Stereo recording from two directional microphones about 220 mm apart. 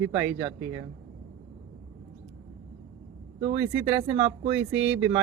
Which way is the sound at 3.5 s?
5° right (ahead or behind).